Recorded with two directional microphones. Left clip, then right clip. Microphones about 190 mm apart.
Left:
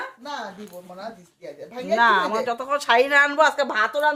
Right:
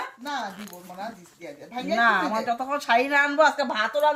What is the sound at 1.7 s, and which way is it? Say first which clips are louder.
A woman's voice: left 3 dB; 35° left (ahead or behind).